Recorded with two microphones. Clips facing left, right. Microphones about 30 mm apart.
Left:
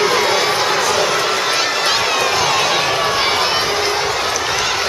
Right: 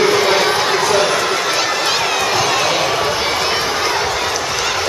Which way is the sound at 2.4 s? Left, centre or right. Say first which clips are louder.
Even; centre.